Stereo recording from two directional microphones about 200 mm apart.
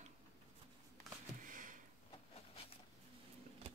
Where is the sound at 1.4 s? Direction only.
40° right (ahead or behind).